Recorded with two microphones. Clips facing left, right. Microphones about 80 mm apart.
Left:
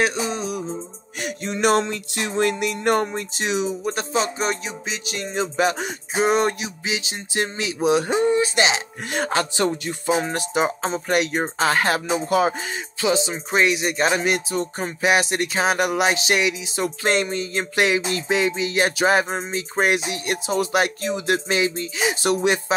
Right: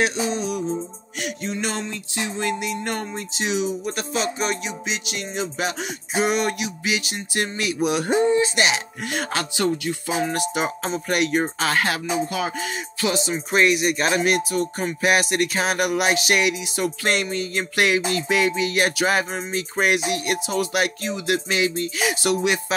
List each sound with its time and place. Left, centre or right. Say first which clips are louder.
0.0 s music: even; left
1.5 s music: left 11 dB; left
13.0 s music: left 2 dB; left
22.3 s music: left 2 dB; left